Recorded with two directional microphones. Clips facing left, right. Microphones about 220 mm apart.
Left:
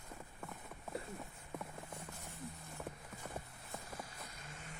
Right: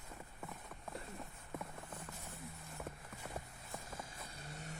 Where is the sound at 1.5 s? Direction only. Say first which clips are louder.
Even; centre (ahead or behind).